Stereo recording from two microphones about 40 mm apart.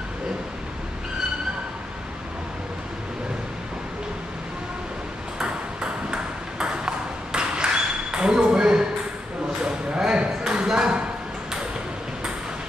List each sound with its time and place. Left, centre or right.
5.4 s ping: centre